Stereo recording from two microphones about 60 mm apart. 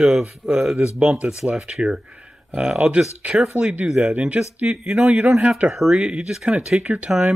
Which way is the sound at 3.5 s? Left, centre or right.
Centre.